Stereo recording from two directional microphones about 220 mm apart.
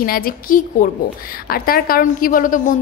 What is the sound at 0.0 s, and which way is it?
A woman's voice, 40° left (ahead or behind).